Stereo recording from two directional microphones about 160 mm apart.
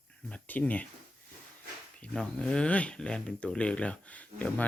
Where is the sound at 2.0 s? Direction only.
5° left (ahead or behind).